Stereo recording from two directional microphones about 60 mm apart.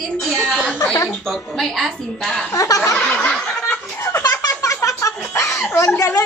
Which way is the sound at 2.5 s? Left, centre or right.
Left.